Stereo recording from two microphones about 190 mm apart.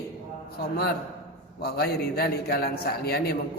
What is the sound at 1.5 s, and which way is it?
A man's voice, 55° left (ahead or behind).